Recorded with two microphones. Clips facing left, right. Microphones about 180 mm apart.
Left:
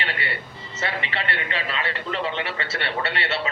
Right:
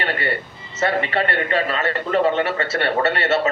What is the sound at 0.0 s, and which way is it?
Music, 45° right (ahead or behind).